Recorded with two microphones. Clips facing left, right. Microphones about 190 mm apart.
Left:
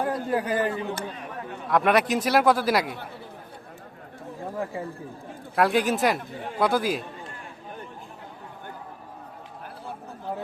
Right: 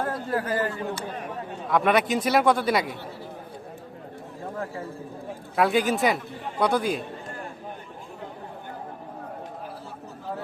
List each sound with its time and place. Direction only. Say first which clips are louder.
0.0 s speech: left 2 dB; 15° left (ahead or behind)
1.6 s a man's voice: even; centre (ahead or behind)
5.5 s a man's voice: even; centre (ahead or behind)